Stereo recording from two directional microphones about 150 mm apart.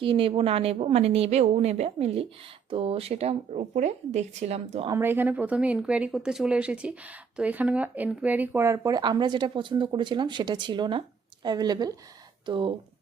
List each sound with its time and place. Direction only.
0.0 s a woman's voice: 35° right (ahead or behind)
4.9 s a woman's voice: 15° right (ahead or behind); by 12.7 s 35° right (ahead or behind)